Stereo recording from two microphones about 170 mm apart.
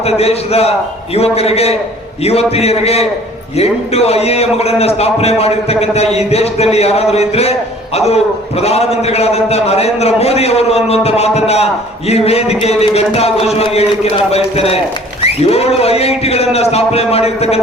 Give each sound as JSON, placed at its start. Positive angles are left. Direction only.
{"t": 0.0, "sound": "a man's voice", "side_deg": 35}